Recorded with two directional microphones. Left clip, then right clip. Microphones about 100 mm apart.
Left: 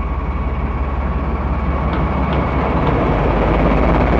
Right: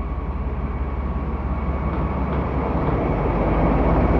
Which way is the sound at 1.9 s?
35° left (ahead or behind).